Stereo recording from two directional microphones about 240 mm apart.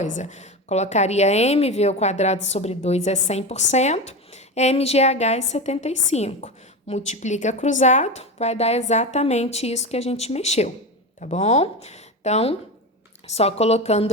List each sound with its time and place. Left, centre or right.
0.0 s a woman's voice: left